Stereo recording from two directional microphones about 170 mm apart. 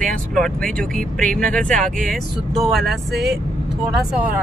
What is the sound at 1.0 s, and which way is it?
Speech, 55° right (ahead or behind).